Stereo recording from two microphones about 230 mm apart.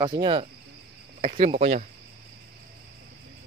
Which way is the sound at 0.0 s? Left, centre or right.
Centre.